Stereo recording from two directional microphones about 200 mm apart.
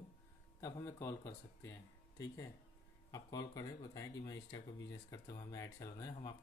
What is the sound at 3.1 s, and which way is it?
Speech, 20° left (ahead or behind).